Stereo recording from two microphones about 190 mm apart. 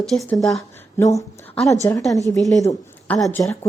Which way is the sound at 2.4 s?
Centre (ahead or behind).